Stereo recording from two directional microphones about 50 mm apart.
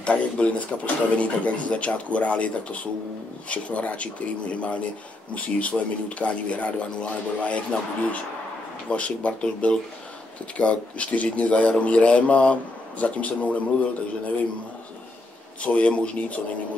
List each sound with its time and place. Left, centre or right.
0.0 s speech: left
15.6 s speech: left